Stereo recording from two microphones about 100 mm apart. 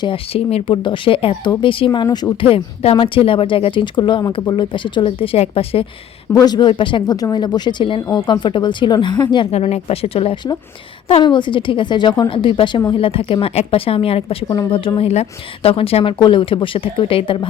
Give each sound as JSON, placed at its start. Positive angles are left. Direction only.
{"t": 0.0, "sound": "speech", "side_deg": 70}
{"t": 1.6, "sound": "speech", "side_deg": 55}
{"t": 2.4, "sound": "speech", "side_deg": 65}
{"t": 6.3, "sound": "speech", "side_deg": 40}
{"t": 7.2, "sound": "speech", "side_deg": 45}
{"t": 9.5, "sound": "speech", "side_deg": 90}
{"t": 11.2, "sound": "speech", "side_deg": 50}
{"t": 12.3, "sound": "a woman's voice", "side_deg": 60}
{"t": 16.1, "sound": "speech", "side_deg": 50}